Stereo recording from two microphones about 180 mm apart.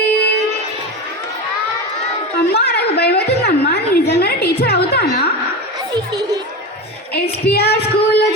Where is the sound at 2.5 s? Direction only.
65° left (ahead or behind).